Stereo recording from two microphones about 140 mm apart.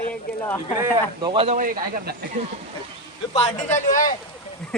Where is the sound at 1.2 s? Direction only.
35° right (ahead or behind).